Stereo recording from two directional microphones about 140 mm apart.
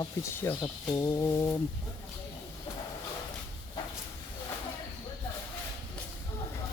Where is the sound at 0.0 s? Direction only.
20° left (ahead or behind).